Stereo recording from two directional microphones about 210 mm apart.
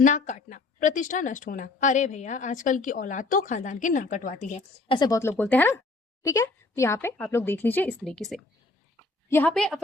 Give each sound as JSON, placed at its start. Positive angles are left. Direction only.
{"t": 0.0, "sound": "a woman's voice", "side_deg": 35}
{"t": 4.9, "sound": "a woman's voice", "side_deg": 15}